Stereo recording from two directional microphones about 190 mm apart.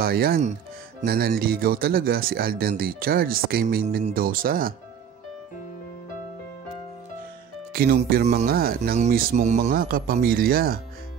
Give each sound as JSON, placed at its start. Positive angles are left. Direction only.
{"t": 0.0, "sound": "speech", "side_deg": -55}
{"t": 7.7, "sound": "speech", "side_deg": -50}